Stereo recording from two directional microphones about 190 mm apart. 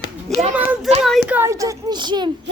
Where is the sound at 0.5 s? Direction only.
5° right (ahead or behind); by 2.3 s 25° right (ahead or behind).